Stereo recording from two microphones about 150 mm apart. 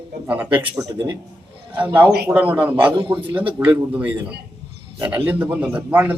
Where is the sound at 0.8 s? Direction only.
25° right (ahead or behind).